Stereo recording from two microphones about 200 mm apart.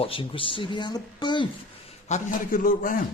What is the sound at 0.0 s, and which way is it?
Speech, 25° left (ahead or behind).